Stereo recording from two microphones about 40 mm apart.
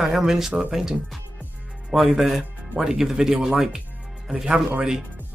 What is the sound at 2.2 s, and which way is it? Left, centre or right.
Speech, centre.